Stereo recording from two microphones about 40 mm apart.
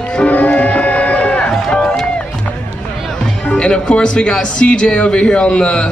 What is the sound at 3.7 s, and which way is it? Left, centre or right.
Speech, left.